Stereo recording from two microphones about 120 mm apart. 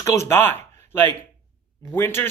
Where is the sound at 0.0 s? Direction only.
20° left (ahead or behind).